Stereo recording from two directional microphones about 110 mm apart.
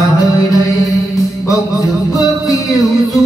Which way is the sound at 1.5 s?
30° left (ahead or behind).